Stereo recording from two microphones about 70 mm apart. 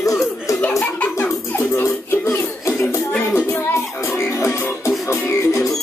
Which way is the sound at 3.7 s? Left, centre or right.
Left.